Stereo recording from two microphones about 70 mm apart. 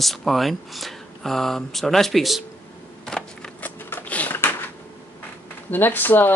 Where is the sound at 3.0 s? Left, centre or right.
Centre.